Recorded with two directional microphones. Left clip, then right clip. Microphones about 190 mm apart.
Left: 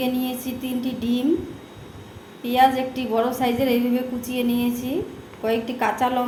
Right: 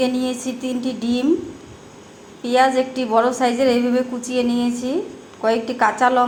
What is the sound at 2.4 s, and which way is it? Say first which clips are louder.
A woman's voice: right 2 dB; 15° right (ahead or behind).